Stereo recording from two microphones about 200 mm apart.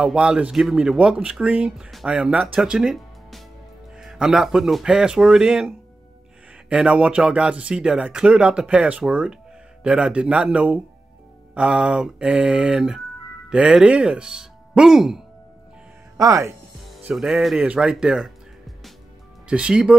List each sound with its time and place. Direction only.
0.0 s speech: 5° right (ahead or behind)
6.7 s speech: 5° right (ahead or behind)
16.2 s speech: 15° right (ahead or behind)
16.8 s speech: centre (ahead or behind)
19.4 s speech: 5° right (ahead or behind)